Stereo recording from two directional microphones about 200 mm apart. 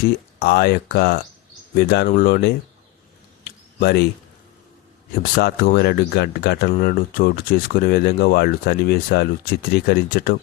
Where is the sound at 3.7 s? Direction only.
55° left (ahead or behind).